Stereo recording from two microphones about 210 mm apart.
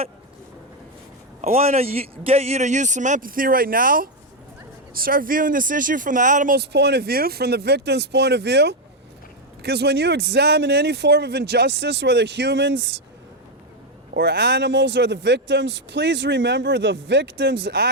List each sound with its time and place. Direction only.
1.4 s speech: 35° right (ahead or behind); by 12.8 s 60° right (ahead or behind)
14.1 s speech: 55° right (ahead or behind)